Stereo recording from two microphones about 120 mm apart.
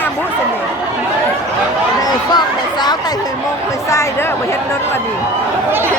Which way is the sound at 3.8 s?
25° left (ahead or behind).